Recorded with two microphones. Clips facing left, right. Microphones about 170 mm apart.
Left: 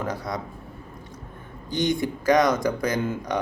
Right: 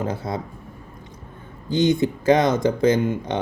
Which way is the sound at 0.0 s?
25° right (ahead or behind).